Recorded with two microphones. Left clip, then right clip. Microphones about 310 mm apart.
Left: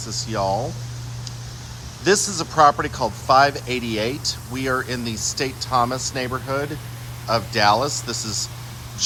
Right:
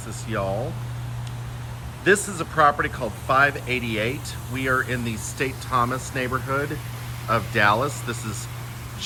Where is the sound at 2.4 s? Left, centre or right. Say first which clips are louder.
Left 3 dB; centre.